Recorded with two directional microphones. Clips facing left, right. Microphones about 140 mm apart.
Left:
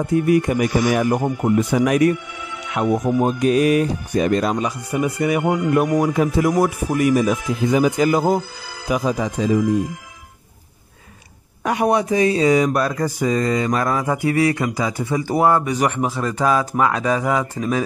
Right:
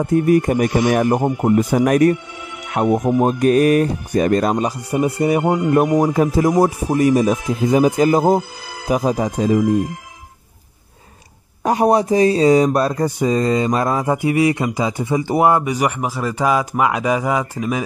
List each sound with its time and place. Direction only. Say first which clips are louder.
0.0 s speech: right 2 dB; 45° right (ahead or behind)
0.7 s speech: right 2 dB; 25° right (ahead or behind); by 2.1 s 45° right (ahead or behind)
2.9 s speech: right 2 dB; 25° right (ahead or behind)
3.3 s speech: right 3 dB; 50° right (ahead or behind)
9.5 s speech: right 2 dB; 25° right (ahead or behind)
11.6 s speech: right 3 dB; 35° right (ahead or behind); by 17.8 s 10° right (ahead or behind)